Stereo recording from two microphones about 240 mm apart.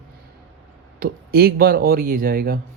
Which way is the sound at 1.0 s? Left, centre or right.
Right.